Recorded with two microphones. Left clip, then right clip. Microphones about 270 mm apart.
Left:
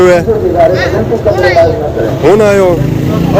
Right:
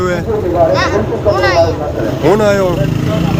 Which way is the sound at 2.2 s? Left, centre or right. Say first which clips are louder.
Left 4 dB; centre.